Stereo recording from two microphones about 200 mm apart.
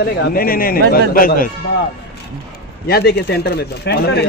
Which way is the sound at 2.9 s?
55° left (ahead or behind).